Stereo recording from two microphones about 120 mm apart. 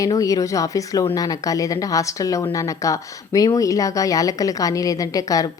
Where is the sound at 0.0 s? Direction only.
30° left (ahead or behind).